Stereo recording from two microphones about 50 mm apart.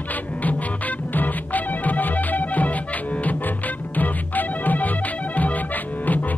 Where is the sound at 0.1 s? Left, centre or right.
Left.